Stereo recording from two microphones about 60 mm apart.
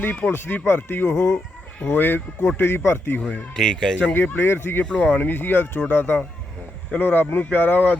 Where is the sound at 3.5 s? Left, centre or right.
Centre.